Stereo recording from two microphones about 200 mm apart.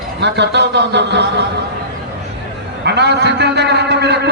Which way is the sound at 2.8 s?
55° right (ahead or behind).